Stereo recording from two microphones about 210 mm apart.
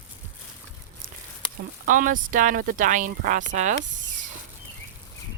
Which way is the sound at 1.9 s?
40° right (ahead or behind).